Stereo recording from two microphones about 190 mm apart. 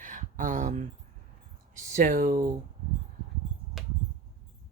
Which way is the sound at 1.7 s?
40° right (ahead or behind).